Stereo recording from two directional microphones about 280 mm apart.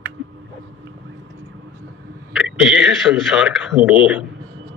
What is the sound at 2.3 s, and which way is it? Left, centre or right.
Speech, centre.